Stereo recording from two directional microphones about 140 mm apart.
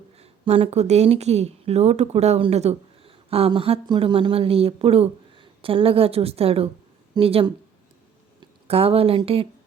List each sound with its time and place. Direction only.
0.2 s a woman's voice: 45° right (ahead or behind)